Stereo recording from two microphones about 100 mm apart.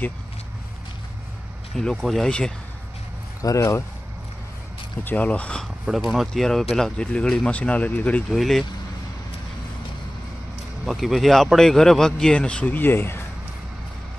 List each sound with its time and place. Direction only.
1.8 s speech: 5° left (ahead or behind)
3.4 s speech: 30° left (ahead or behind)
5.0 s speech: 15° left (ahead or behind)
5.9 s speech: centre (ahead or behind); by 8.2 s 15° left (ahead or behind)
8.3 s speech: centre (ahead or behind)
10.9 s speech: centre (ahead or behind); by 13.2 s 20° left (ahead or behind)